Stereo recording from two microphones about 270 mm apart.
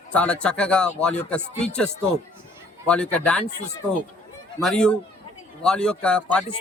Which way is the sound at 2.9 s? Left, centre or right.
Centre.